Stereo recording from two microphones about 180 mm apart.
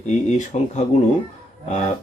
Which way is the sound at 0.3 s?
40° left (ahead or behind).